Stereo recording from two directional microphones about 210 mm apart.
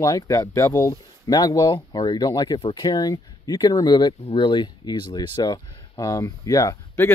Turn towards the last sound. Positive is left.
turn(degrees=15)  # may be behind; listen again after turning